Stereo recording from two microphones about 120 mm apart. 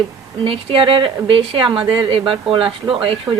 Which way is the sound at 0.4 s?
50° right (ahead or behind).